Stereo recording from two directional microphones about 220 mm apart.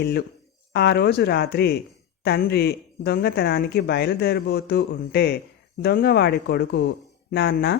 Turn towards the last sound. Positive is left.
turn(degrees=50)  # may be behind; listen again after turning